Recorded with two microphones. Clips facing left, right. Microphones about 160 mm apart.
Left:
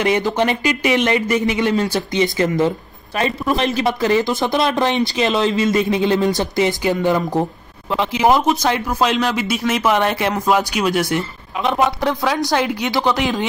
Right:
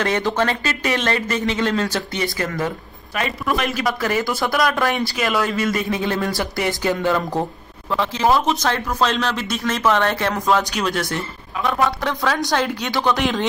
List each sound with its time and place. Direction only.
0.0 s speech: 15° left (ahead or behind)
11.1 s speech: 20° left (ahead or behind)